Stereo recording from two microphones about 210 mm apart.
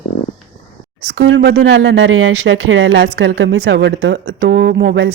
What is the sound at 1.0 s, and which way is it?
A woman's voice, 65° right (ahead or behind).